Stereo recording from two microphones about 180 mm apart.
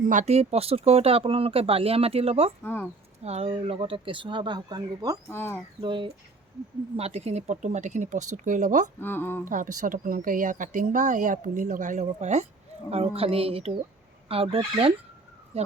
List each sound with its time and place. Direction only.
0.0 s speech: 40° right (ahead or behind)
2.6 s a woman's voice: 10° left (ahead or behind)
3.2 s speech: 35° right (ahead or behind)
5.3 s a woman's voice: 10° left (ahead or behind)
5.8 s speech: 30° right (ahead or behind); by 8.9 s 45° right (ahead or behind)
9.0 s a woman's voice: 10° left (ahead or behind)
9.5 s speech: 50° right (ahead or behind)